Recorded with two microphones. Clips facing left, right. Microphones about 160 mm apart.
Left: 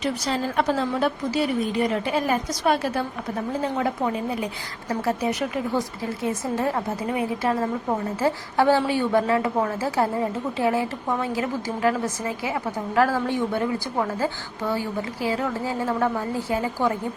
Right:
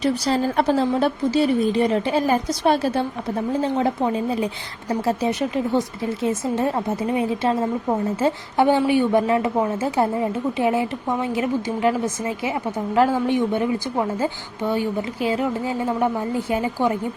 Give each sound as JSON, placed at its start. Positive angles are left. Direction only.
{"t": 0.0, "sound": "a woman's voice", "side_deg": -35}